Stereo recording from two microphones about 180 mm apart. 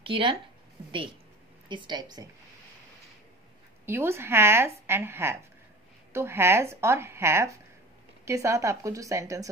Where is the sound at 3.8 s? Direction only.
15° right (ahead or behind).